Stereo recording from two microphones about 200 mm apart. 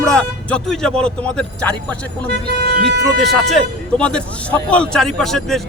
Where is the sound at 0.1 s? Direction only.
5° left (ahead or behind).